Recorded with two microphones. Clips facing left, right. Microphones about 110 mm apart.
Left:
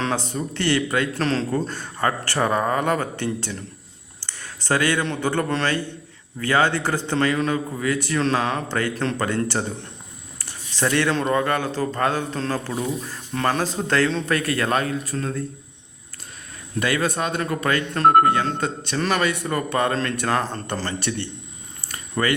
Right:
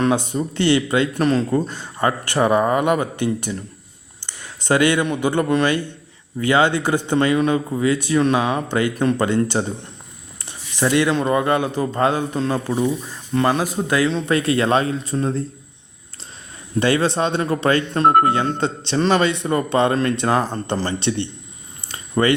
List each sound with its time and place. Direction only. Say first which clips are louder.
0.0 s a man's voice: right 6 dB; 15° right (ahead or behind)
13.3 s speech: right 4 dB; 5° right (ahead or behind)
14.3 s speech: right 5 dB; 20° right (ahead or behind)
16.8 s speech: right 5 dB; 30° right (ahead or behind)
21.8 s a sound: right 5 dB; 25° right (ahead or behind)